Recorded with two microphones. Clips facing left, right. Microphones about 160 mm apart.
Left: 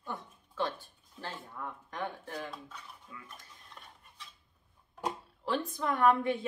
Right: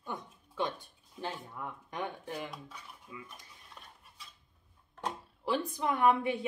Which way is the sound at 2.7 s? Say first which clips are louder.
Right 1 dB; 10° right (ahead or behind).